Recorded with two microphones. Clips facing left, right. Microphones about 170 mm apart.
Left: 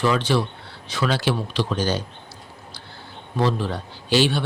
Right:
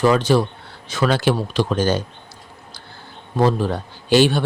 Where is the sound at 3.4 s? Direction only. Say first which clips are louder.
Right 5 dB; 45° right (ahead or behind).